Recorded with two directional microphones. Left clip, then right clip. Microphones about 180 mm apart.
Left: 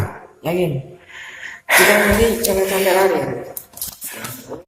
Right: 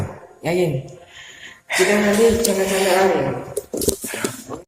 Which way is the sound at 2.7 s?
Centre (ahead or behind).